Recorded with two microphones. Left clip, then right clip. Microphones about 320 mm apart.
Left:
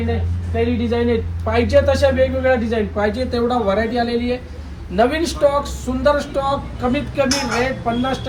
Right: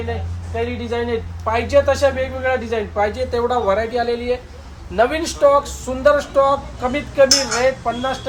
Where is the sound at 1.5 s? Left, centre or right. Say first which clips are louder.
Even; centre.